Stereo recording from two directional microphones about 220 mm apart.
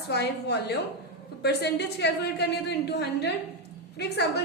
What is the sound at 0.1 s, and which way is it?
A woman's voice, 50° left (ahead or behind).